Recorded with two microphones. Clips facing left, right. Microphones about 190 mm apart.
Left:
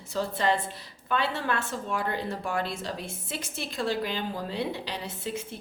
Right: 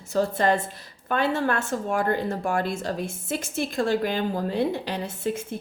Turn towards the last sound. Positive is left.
turn(degrees=-50)  # may be behind; listen again after turning